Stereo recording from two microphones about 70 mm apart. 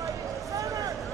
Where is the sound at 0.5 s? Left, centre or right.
Right.